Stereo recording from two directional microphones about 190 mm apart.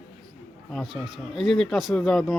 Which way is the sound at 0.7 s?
Centre (ahead or behind).